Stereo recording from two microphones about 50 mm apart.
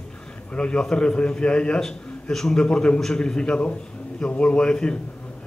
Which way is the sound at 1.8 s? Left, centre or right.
Centre.